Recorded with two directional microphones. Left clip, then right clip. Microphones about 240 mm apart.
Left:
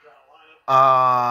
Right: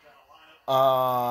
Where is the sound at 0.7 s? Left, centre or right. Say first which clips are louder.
Left 7 dB; centre.